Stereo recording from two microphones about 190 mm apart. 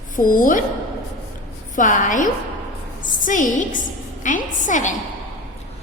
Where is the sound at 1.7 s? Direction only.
45° left (ahead or behind).